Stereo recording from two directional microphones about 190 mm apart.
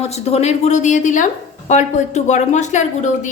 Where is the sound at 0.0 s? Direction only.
35° left (ahead or behind).